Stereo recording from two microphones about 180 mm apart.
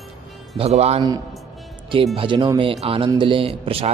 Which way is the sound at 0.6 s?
35° right (ahead or behind).